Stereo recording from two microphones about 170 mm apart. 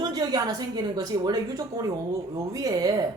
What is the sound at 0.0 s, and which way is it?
A woman's voice, 25° right (ahead or behind).